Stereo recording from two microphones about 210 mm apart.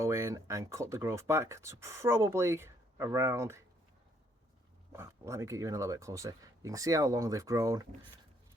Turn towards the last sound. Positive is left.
turn(degrees=-15)  # may be behind; listen again after turning